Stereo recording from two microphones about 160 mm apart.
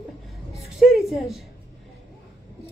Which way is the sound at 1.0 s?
Centre (ahead or behind).